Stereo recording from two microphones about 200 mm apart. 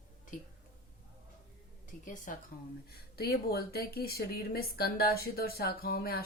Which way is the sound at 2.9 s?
50° left (ahead or behind).